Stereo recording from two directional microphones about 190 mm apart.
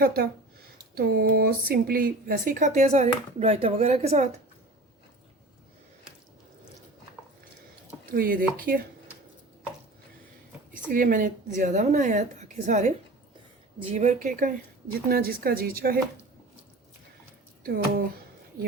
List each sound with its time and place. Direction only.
0.0 s a woman's voice: 55° right (ahead or behind); by 4.3 s 35° right (ahead or behind)
8.0 s a woman's voice: 50° right (ahead or behind)
10.9 s a woman's voice: 45° right (ahead or behind)
18.6 s a woman's voice: 50° right (ahead or behind)